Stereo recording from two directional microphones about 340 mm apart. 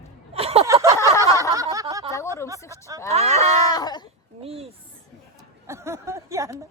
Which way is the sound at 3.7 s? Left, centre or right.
Centre.